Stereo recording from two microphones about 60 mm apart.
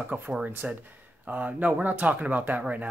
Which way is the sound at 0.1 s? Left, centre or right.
Right.